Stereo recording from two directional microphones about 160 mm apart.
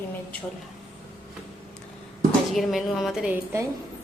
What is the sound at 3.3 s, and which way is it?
Speech, 15° right (ahead or behind).